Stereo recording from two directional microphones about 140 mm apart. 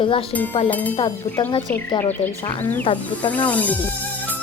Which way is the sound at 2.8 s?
40° left (ahead or behind).